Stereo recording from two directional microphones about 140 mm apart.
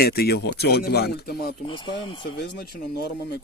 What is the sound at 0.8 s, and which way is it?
Speech, 90° left.